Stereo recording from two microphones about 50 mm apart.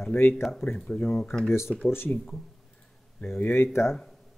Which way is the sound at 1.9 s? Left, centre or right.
Left.